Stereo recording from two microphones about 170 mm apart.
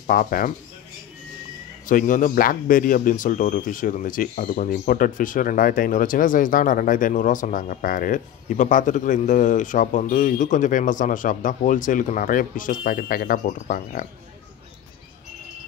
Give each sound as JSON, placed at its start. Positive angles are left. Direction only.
{"t": 0.0, "sound": "speech", "side_deg": 55}
{"t": 1.9, "sound": "speech", "side_deg": 50}